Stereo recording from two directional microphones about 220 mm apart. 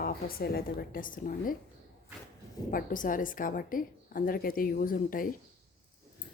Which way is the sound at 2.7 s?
40° left (ahead or behind).